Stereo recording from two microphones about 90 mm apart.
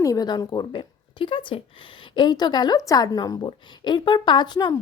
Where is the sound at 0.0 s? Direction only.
40° left (ahead or behind).